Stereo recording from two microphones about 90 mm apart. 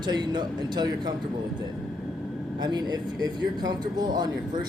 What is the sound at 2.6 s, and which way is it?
Speech, 50° right (ahead or behind).